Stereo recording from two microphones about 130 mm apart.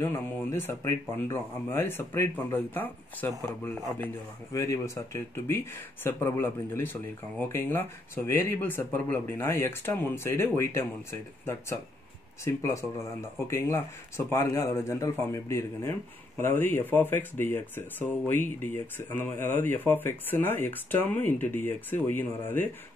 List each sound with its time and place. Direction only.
0.0 s speech: 20° left (ahead or behind)
4.5 s speech: 25° left (ahead or behind)